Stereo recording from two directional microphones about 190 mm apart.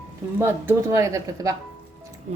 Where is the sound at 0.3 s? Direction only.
10° right (ahead or behind).